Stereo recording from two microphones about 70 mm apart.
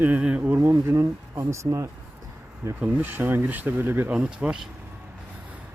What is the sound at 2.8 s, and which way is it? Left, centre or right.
Speech, right.